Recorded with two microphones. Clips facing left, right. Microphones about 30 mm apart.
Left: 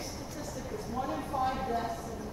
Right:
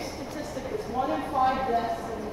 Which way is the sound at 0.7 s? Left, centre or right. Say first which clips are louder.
Right 7 dB; right.